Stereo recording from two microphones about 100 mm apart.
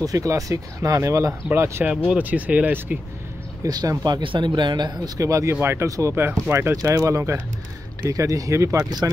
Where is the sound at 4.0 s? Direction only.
50° right (ahead or behind); by 8.8 s 30° right (ahead or behind).